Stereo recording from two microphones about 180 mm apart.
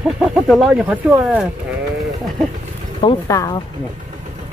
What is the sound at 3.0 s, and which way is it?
Speech, 25° left (ahead or behind).